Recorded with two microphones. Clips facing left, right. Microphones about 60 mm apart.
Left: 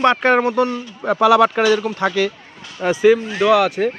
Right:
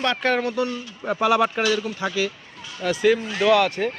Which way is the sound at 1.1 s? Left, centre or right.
Left.